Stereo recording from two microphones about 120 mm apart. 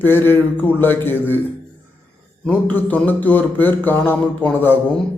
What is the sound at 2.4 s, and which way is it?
A man's voice, 15° left (ahead or behind).